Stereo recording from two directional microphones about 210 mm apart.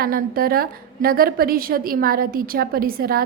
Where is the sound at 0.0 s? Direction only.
45° right (ahead or behind).